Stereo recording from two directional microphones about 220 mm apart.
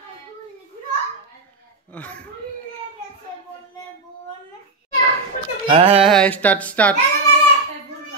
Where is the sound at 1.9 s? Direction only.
5° left (ahead or behind).